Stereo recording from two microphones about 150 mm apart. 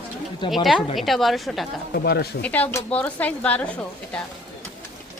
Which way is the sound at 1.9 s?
90° left.